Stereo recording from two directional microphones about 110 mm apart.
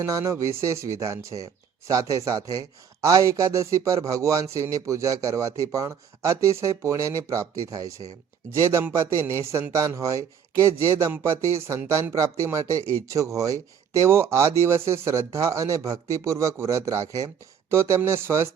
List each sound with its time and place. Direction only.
0.0 s speech: 25° right (ahead or behind)